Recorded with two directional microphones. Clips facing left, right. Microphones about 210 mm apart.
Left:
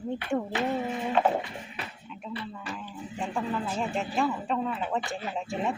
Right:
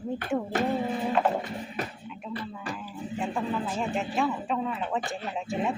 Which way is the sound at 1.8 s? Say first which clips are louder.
Right 7 dB; 40° right (ahead or behind).